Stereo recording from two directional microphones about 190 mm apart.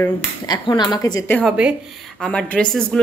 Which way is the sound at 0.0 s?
20° left (ahead or behind).